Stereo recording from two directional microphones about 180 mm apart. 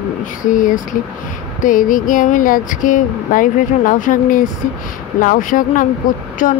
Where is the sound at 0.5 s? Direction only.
45° left (ahead or behind).